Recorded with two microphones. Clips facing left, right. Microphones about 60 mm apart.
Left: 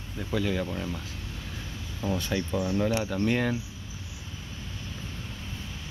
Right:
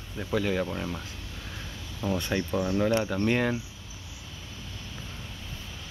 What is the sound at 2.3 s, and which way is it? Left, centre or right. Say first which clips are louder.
Speech: right 1 dB; centre.